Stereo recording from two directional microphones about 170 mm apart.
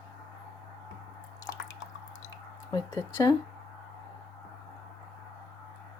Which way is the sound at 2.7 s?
25° left (ahead or behind).